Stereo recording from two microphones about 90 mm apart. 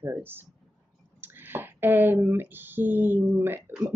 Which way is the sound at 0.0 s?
25° right (ahead or behind).